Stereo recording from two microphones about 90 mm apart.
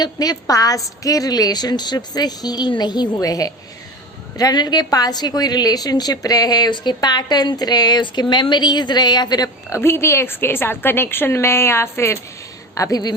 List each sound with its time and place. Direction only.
0.0 s a woman's voice: 45° left (ahead or behind)
9.7 s a woman's voice: 25° left (ahead or behind)